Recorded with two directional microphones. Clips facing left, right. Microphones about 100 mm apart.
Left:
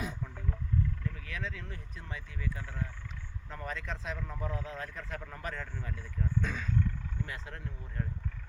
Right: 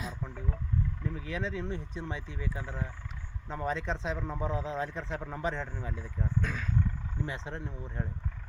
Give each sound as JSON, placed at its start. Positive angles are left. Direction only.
{"t": 1.0, "sound": "speech", "side_deg": -20}
{"t": 6.4, "sound": "speech", "side_deg": -5}
{"t": 7.3, "sound": "speech", "side_deg": -25}